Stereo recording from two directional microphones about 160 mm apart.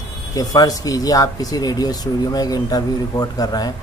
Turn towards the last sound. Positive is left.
turn(degrees=25)  # may be behind; listen again after turning